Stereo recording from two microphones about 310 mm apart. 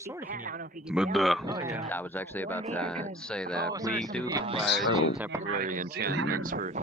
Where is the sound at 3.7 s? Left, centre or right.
Centre.